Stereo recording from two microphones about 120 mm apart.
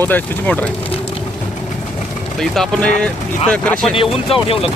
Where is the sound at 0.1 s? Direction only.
15° left (ahead or behind).